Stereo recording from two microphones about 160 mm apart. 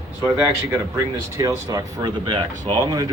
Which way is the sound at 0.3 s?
10° right (ahead or behind).